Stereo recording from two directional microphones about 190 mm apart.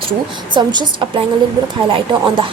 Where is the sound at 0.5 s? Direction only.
25° right (ahead or behind).